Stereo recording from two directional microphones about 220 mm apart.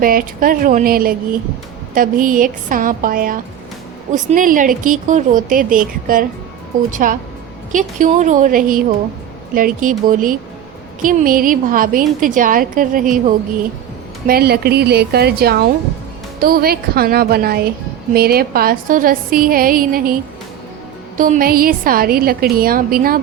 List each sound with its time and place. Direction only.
0.0 s a woman's voice: 40° right (ahead or behind)
14.3 s a woman's voice: 45° right (ahead or behind)
21.2 s a woman's voice: 40° right (ahead or behind)